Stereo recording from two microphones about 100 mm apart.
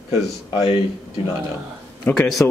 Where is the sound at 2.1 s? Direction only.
20° left (ahead or behind).